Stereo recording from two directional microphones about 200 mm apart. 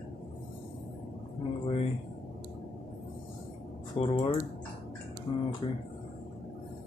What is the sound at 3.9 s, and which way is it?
Speech, 25° left (ahead or behind).